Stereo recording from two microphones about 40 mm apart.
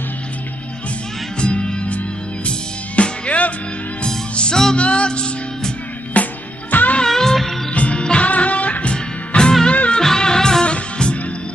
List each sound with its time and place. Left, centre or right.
1.4 s music: left
4.4 s music: centre
4.7 s music: left
6.2 s music: left
7.1 s music: centre
7.7 s music: left
8.3 s music: left
8.9 s music: left